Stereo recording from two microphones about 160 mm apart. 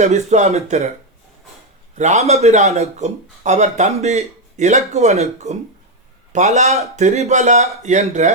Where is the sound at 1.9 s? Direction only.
45° right (ahead or behind).